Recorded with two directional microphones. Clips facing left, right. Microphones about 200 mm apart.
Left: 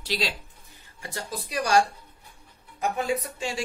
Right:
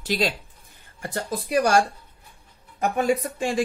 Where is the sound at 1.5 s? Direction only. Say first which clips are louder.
Right 3 dB; 50° right (ahead or behind).